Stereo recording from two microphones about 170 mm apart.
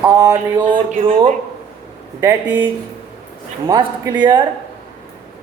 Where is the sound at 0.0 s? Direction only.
20° right (ahead or behind).